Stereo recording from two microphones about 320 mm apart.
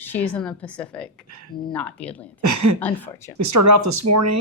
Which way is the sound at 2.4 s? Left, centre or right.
Right.